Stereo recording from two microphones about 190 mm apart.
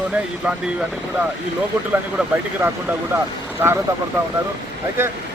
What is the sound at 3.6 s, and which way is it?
Speech, 10° right (ahead or behind).